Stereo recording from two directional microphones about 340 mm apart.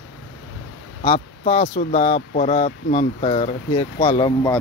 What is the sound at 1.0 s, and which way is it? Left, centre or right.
Speech, centre.